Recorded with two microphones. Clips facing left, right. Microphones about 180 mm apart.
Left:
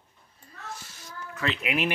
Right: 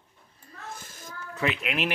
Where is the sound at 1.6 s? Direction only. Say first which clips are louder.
Left 2 dB; 5° left (ahead or behind).